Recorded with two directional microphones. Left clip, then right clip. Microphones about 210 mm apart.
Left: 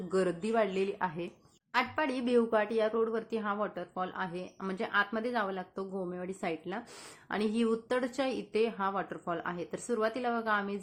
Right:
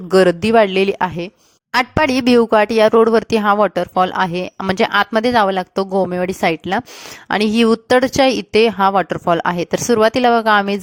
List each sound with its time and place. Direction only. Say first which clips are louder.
0.1 s speech: right 19 dB; 45° right (ahead or behind)